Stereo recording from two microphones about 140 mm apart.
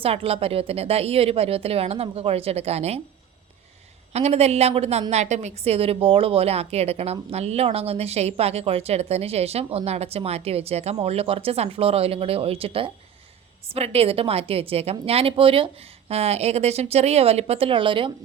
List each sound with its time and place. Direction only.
0.0 s a woman's voice: 45° right (ahead or behind)
4.1 s a woman's voice: 50° right (ahead or behind)